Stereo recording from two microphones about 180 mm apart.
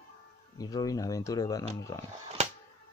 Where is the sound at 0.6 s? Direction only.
20° left (ahead or behind).